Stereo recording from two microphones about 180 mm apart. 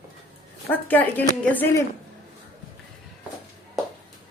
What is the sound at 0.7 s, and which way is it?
Speech, 10° left (ahead or behind).